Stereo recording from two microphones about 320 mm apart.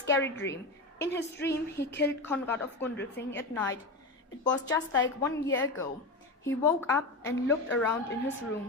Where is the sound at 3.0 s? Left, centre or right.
Left.